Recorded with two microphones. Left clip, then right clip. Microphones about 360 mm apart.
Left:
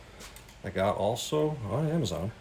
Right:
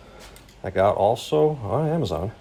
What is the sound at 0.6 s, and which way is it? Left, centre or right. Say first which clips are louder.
Speech: right 9 dB; centre.